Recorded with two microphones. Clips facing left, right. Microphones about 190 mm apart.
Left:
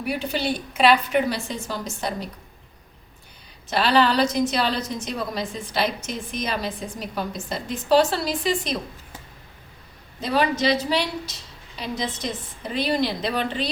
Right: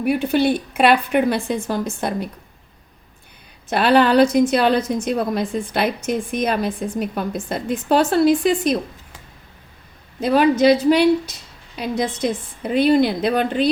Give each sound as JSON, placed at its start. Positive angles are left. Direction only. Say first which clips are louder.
{"t": 0.0, "sound": "a woman's voice", "louder": "right 8 dB", "side_deg": -55}
{"t": 3.7, "sound": "a woman's voice", "louder": "right 5 dB", "side_deg": -55}
{"t": 10.2, "sound": "a woman's voice", "louder": "right 7 dB", "side_deg": -55}